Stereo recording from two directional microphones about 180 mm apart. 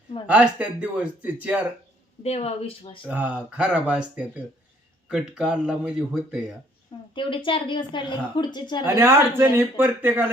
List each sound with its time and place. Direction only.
0.3 s speech: 5° right (ahead or behind)
2.2 s speech: 35° left (ahead or behind)
3.1 s speech: 10° right (ahead or behind)
7.1 s speech: 30° left (ahead or behind)
8.8 s speech: 15° right (ahead or behind)